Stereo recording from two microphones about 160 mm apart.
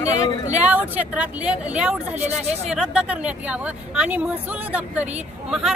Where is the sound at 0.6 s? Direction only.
10° right (ahead or behind).